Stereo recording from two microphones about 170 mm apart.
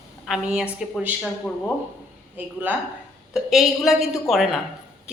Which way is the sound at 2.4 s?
10° right (ahead or behind).